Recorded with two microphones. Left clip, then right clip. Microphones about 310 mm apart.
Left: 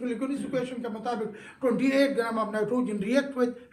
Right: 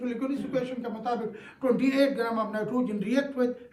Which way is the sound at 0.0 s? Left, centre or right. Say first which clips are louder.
Even; right.